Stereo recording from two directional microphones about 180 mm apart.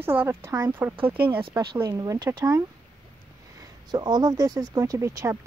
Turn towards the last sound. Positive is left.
turn(degrees=-15)  # may be behind; listen again after turning